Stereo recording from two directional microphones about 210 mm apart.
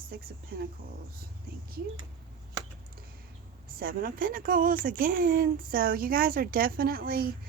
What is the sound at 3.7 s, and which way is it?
Speech, 45° right (ahead or behind).